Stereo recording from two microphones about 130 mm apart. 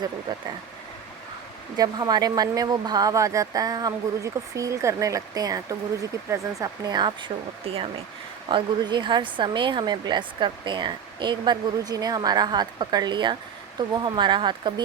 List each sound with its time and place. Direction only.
1.7 s speech: 30° right (ahead or behind)